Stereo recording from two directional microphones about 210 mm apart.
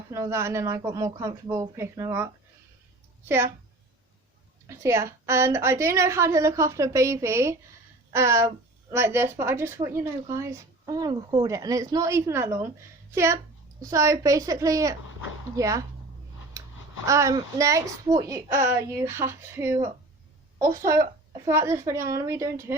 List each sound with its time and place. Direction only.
0.1 s a woman's voice: 15° right (ahead or behind)
4.6 s a woman's voice: 15° right (ahead or behind)
16.6 s a sound: 15° right (ahead or behind)
17.1 s a woman's voice: 15° right (ahead or behind)